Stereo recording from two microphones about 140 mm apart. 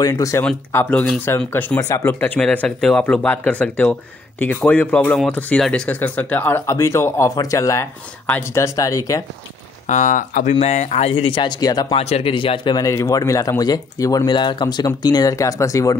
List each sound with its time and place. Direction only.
0.0 s speech: 20° left (ahead or behind)
9.8 s speech: 65° left (ahead or behind)
10.5 s speech: 50° left (ahead or behind); by 12.0 s 30° left (ahead or behind)
12.0 s speech: 45° left (ahead or behind); by 16.0 s 25° left (ahead or behind)